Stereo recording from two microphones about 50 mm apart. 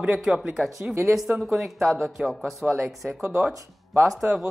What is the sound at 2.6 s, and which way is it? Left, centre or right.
Speech, right.